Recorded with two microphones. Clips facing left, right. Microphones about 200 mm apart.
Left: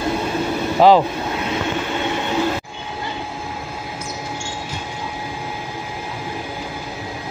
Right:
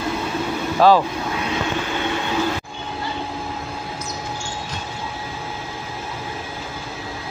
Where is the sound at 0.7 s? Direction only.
20° left (ahead or behind).